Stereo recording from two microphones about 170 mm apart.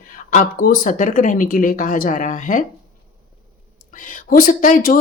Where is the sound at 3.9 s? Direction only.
55° left (ahead or behind).